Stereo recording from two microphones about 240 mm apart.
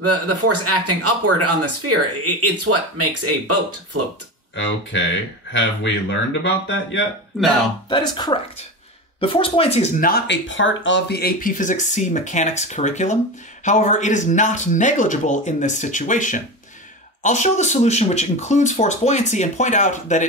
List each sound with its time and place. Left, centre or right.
0.0 s speech: right
4.6 s a man's voice: left
7.9 s speech: centre